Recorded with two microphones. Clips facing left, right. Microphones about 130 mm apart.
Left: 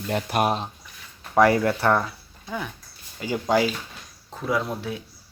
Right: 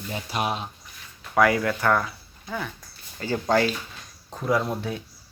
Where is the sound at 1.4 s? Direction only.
30° left (ahead or behind).